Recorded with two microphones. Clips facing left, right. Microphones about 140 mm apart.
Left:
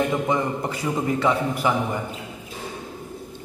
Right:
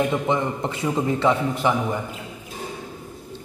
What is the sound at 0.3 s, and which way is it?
Speech, 25° right (ahead or behind).